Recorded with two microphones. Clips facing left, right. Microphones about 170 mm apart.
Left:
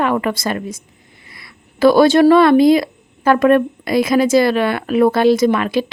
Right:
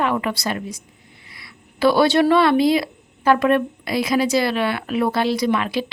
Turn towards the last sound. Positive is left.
turn(degrees=50)  # may be behind; listen again after turning